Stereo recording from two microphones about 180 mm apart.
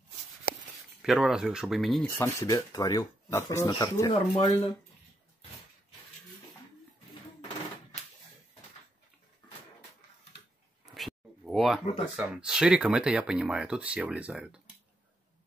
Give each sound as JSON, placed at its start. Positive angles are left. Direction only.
{"t": 1.0, "sound": "speech", "side_deg": -5}
{"t": 2.0, "sound": "speech", "side_deg": 15}
{"t": 11.0, "sound": "speech", "side_deg": 0}